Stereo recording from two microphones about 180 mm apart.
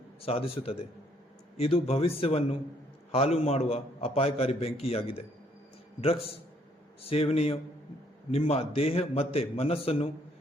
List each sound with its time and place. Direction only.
0.2 s a man's voice: 30° left (ahead or behind)